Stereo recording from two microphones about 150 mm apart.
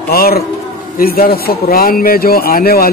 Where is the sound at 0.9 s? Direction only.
75° left (ahead or behind).